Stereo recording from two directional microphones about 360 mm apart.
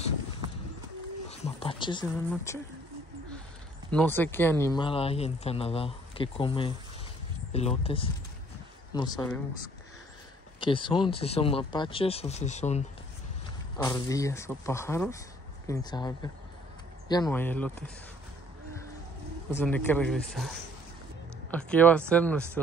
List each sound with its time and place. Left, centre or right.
1.6 s speech: centre
3.9 s speech: centre
10.6 s speech: centre
13.8 s speech: centre
19.5 s speech: centre